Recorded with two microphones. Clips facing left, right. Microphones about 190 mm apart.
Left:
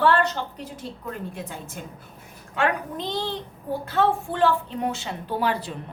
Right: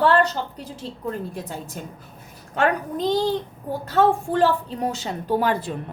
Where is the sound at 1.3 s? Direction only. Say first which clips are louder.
Right 3 dB; 40° right (ahead or behind).